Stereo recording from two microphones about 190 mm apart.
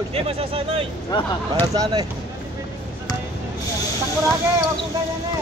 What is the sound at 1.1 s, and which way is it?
Speech, 25° left (ahead or behind).